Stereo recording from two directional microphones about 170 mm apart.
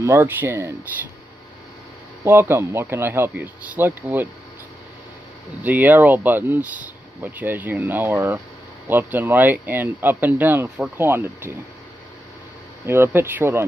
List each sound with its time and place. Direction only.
0.0 s speech: 15° right (ahead or behind)
2.2 s speech: 15° right (ahead or behind)
5.6 s speech: 10° right (ahead or behind)
12.8 s speech: 15° right (ahead or behind)